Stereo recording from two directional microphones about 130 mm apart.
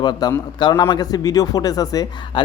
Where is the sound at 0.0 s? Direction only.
35° left (ahead or behind).